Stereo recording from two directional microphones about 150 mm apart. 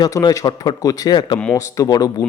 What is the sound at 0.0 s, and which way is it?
A man's voice, 25° left (ahead or behind).